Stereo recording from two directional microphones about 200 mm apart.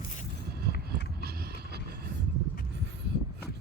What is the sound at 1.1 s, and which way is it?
Vehicle, 50° right (ahead or behind).